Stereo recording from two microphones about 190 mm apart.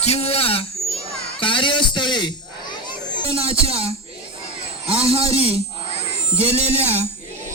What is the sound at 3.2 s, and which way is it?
A man's voice, 30° right (ahead or behind).